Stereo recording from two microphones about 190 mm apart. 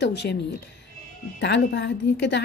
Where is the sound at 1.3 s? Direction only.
65° left (ahead or behind).